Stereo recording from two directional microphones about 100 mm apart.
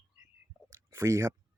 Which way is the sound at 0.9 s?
30° right (ahead or behind).